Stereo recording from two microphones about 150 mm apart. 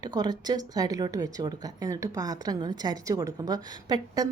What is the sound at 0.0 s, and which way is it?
Speech, 25° right (ahead or behind).